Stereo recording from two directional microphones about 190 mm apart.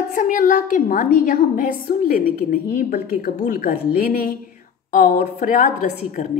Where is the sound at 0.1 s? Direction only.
45° left (ahead or behind).